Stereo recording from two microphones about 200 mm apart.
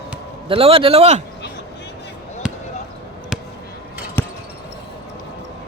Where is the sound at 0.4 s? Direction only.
30° right (ahead or behind).